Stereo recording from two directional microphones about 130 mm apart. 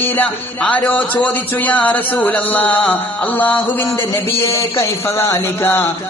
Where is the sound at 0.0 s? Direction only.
15° left (ahead or behind).